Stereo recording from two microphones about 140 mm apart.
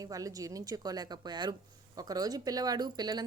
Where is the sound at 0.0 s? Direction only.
25° right (ahead or behind).